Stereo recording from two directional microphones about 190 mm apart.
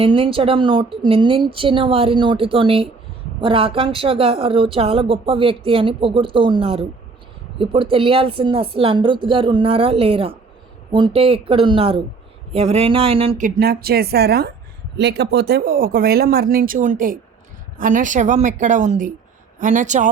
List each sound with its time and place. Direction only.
0.0 s a woman's voice: 30° right (ahead or behind)
13.4 s a woman's voice: 55° right (ahead or behind)